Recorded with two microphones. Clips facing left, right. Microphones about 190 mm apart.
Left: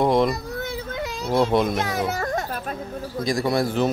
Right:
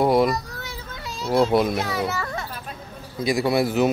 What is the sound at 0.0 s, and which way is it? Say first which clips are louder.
Speech: right 1 dB; 5° right (ahead or behind).